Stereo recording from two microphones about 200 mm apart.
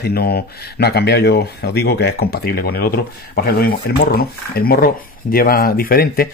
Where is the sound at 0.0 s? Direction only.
50° left (ahead or behind).